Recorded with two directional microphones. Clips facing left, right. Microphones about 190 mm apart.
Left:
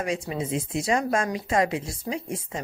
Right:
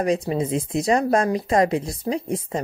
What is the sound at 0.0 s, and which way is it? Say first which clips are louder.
Speech: right 7 dB; 40° right (ahead or behind).